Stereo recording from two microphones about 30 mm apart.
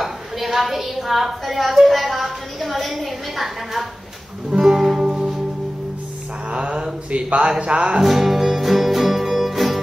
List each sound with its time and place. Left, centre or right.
0.0 s a woman's voice: centre
4.6 s music: centre
7.1 s speech: right
7.4 s music: right
8.0 s music: centre